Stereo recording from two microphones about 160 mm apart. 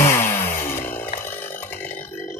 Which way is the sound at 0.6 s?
15° left (ahead or behind).